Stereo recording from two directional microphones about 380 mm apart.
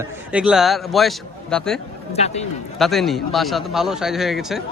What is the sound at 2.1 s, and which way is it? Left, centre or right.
Speech, centre.